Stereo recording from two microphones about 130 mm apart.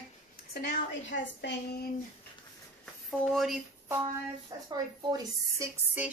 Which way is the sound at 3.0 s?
Centre (ahead or behind).